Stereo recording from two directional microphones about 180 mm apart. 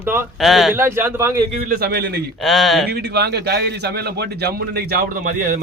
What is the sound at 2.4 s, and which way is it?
Speech, centre (ahead or behind).